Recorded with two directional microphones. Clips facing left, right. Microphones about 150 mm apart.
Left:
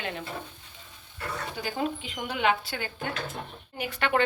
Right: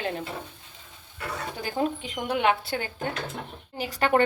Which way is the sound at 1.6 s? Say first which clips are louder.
Right 4 dB; 50° right (ahead or behind).